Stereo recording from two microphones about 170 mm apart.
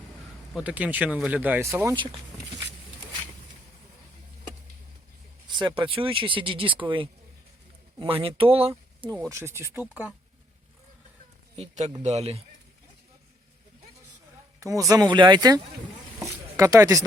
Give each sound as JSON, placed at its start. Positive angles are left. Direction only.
{"t": 0.5, "sound": "speech", "side_deg": -10}
{"t": 5.5, "sound": "speech", "side_deg": -25}
{"t": 9.3, "sound": "speech", "side_deg": -15}
{"t": 11.5, "sound": "speech", "side_deg": -40}
{"t": 14.6, "sound": "speech", "side_deg": -20}